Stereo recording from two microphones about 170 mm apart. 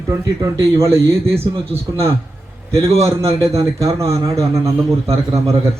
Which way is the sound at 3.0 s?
20° right (ahead or behind).